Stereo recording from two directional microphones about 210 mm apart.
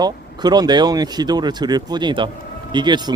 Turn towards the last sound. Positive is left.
turn(degrees=-20)  # may be behind; listen again after turning